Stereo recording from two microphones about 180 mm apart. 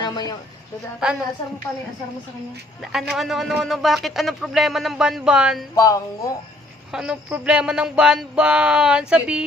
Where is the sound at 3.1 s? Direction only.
Centre (ahead or behind).